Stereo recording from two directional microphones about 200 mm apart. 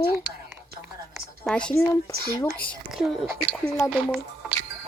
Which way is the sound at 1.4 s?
5° left (ahead or behind).